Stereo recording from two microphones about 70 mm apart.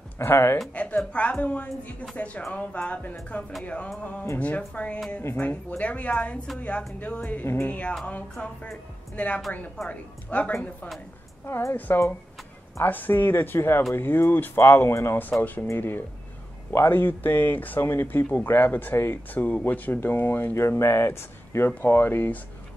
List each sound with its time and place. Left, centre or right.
0.2 s speech: left
0.7 s speech: centre
7.4 s speech: left
9.1 s a woman's voice: left
11.4 s speech: left
20.6 s speech: left